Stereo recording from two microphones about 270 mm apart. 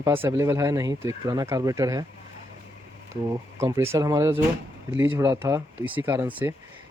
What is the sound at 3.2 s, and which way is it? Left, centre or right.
Speech, centre.